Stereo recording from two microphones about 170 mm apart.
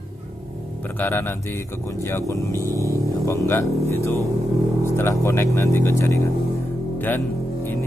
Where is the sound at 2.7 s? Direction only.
15° right (ahead or behind).